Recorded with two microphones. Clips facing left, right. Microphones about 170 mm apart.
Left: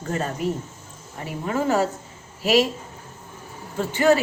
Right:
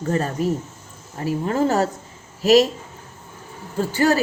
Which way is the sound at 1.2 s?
40° right (ahead or behind).